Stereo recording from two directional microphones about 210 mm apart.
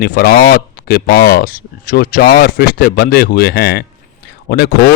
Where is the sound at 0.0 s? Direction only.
45° left (ahead or behind).